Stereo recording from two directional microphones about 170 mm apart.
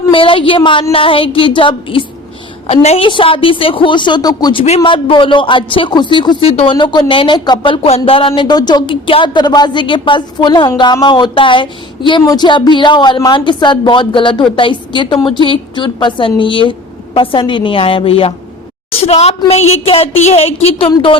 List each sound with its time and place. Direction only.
0.1 s a woman's voice: 30° left (ahead or behind)
4.6 s a woman's voice: 35° left (ahead or behind)